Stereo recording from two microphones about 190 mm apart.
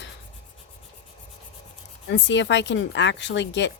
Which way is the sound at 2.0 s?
70° left (ahead or behind).